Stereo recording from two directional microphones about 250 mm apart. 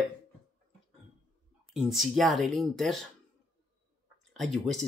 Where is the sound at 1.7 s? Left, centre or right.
Centre.